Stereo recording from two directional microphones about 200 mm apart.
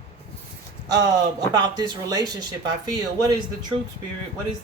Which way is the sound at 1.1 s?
20° right (ahead or behind).